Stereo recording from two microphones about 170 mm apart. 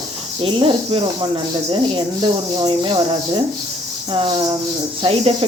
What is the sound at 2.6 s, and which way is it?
Speech, 30° right (ahead or behind).